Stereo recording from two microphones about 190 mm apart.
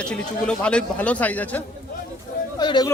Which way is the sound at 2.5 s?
20° left (ahead or behind).